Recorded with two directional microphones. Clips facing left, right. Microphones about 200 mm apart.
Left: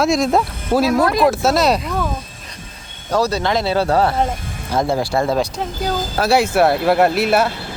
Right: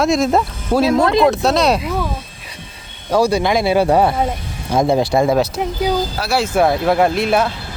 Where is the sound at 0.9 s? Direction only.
25° right (ahead or behind).